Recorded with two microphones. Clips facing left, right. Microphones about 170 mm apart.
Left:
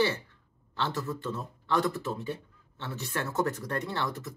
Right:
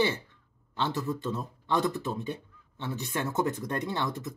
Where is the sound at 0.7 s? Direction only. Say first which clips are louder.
Right 2 dB; 15° right (ahead or behind).